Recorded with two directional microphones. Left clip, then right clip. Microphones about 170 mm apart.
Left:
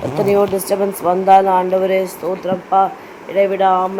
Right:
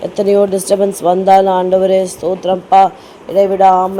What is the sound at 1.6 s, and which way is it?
Speech, 50° right (ahead or behind).